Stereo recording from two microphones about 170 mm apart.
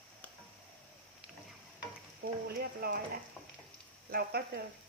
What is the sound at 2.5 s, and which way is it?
Speech, 65° right (ahead or behind).